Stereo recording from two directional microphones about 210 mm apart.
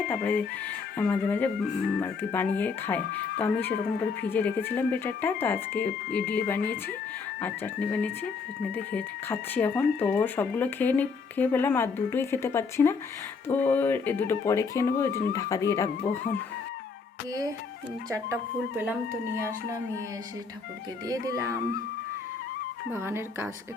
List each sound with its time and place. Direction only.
0.1 s speech: 10° left (ahead or behind)
21.1 s speech: 15° right (ahead or behind)
22.9 s speech: 10° right (ahead or behind)